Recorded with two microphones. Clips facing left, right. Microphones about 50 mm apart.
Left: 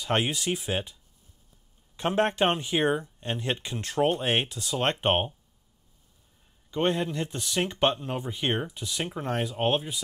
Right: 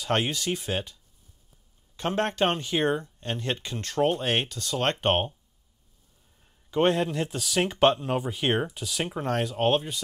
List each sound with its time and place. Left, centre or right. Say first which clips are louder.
0.1 s speech: even; centre
2.0 s speech: left 1 dB; left
6.7 s speech: right 3 dB; centre